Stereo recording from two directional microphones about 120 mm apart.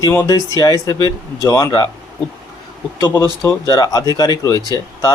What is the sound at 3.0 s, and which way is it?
Speech, 20° left (ahead or behind).